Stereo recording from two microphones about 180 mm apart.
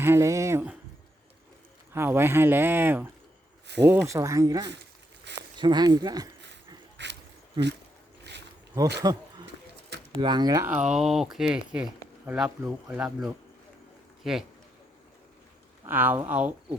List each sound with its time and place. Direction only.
0.0 s speech: 15° right (ahead or behind)
1.9 s speech: 10° right (ahead or behind)
4.7 s a sound: 75° right (ahead or behind)
5.5 s speech: 25° right (ahead or behind)
6.9 s a sound: 75° right (ahead or behind)
8.3 s zipper: 70° right (ahead or behind)
9.0 s speech: 20° right (ahead or behind)
10.7 s speech: 5° right (ahead or behind)
15.9 s speech: 10° right (ahead or behind)